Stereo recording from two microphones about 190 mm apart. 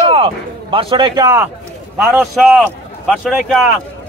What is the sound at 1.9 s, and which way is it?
Speech, centre (ahead or behind).